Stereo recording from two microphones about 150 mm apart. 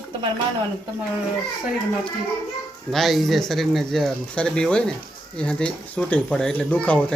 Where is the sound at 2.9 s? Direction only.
Centre (ahead or behind).